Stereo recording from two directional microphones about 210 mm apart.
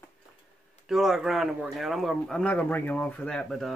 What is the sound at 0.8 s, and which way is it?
Speech, centre (ahead or behind).